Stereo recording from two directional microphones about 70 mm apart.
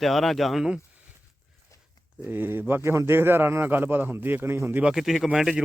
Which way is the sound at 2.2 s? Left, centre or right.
Right.